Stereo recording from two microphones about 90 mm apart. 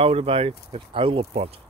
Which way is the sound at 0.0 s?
90° right.